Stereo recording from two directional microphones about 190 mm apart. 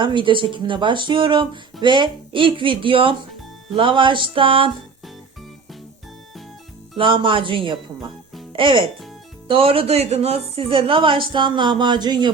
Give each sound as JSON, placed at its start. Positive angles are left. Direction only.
{"t": 0.0, "sound": "speech", "side_deg": -25}
{"t": 6.9, "sound": "speech", "side_deg": -25}